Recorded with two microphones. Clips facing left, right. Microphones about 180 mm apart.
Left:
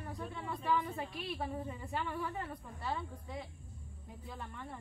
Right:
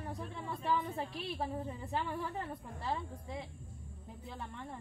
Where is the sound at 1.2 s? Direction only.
30° right (ahead or behind).